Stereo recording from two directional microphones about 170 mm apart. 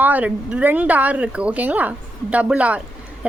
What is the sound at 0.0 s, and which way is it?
A woman's voice, 10° right (ahead or behind).